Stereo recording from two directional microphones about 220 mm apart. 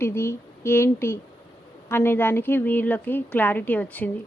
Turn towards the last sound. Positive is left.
turn(degrees=5)  # may be behind; listen again after turning